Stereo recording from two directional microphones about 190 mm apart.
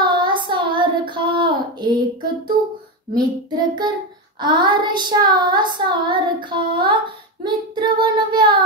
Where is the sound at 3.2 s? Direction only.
20° right (ahead or behind).